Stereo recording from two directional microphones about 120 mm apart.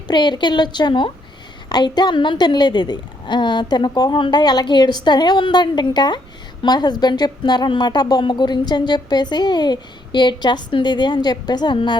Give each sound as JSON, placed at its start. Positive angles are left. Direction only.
{"t": 0.1, "sound": "a woman's voice", "side_deg": 40}